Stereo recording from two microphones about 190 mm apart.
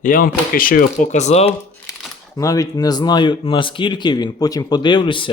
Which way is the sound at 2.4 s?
20° left (ahead or behind).